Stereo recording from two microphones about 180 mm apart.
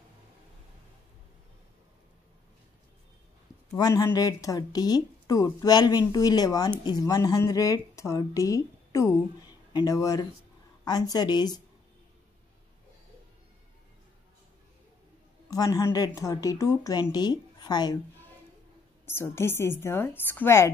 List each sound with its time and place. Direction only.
3.7 s speech: 20° left (ahead or behind)
15.5 s a woman's voice: 20° left (ahead or behind)
19.0 s a woman's voice: 15° left (ahead or behind)